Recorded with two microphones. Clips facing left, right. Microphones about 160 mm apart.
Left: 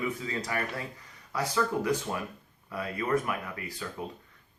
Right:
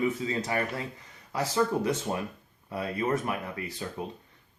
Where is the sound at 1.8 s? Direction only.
25° right (ahead or behind).